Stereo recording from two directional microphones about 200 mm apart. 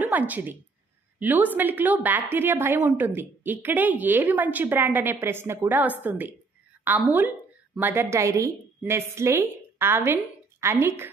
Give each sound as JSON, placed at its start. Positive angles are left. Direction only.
{"t": 0.0, "sound": "a woman's voice", "side_deg": -10}